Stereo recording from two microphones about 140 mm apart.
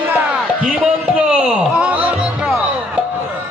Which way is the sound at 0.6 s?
5° right (ahead or behind).